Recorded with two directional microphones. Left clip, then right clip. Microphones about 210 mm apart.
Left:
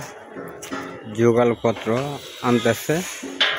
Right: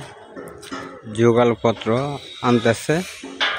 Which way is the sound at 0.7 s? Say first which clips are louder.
Left 1 dB; 40° left (ahead or behind).